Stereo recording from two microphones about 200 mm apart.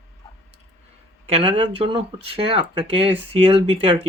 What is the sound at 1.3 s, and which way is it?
Speech, 30° right (ahead or behind).